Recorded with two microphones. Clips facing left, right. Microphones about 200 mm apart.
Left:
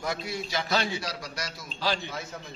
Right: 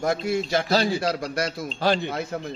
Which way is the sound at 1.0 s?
55° right (ahead or behind).